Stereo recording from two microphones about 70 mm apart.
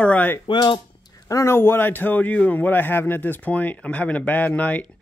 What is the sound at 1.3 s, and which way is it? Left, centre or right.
Speech, left.